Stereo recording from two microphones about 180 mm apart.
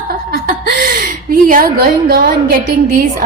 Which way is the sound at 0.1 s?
55° right (ahead or behind).